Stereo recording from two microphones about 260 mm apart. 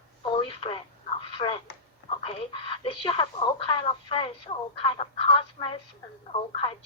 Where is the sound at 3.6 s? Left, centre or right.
Centre.